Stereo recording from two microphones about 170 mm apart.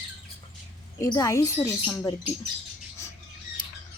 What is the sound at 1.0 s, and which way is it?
Speech, 20° left (ahead or behind).